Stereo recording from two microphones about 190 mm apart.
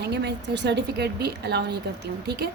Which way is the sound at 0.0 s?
60° right (ahead or behind).